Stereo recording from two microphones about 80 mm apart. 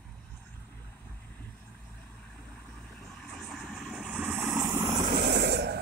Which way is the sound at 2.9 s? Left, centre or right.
Centre.